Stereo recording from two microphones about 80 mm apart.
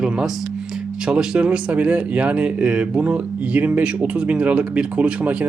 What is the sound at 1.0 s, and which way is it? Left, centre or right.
Speech, centre.